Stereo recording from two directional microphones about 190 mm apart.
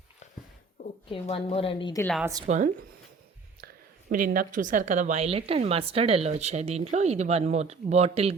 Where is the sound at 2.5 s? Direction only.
35° right (ahead or behind).